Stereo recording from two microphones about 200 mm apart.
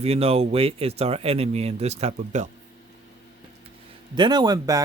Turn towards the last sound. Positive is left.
turn(degrees=-20)  # may be behind; listen again after turning